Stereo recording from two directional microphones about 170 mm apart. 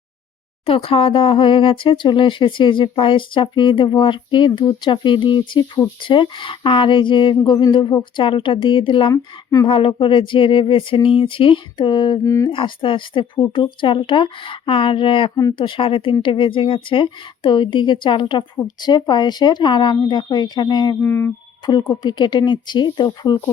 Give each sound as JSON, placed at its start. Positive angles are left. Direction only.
{"t": 0.6, "sound": "speech", "side_deg": 35}
{"t": 9.6, "sound": "speech", "side_deg": 30}
{"t": 12.5, "sound": "speech", "side_deg": 30}
{"t": 21.0, "sound": "a sound", "side_deg": 15}
{"t": 21.7, "sound": "speech", "side_deg": 25}